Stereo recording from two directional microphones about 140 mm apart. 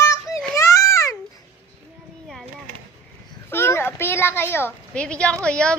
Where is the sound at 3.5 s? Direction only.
15° left (ahead or behind).